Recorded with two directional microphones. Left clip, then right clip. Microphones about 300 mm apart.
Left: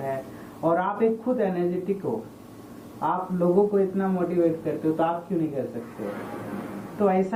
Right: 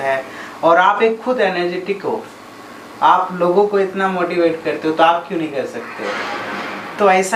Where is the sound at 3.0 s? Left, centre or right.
Centre.